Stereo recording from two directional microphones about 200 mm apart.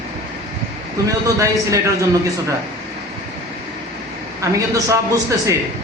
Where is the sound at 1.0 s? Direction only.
15° right (ahead or behind).